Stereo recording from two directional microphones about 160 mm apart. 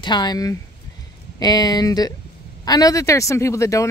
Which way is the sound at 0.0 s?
25° left (ahead or behind).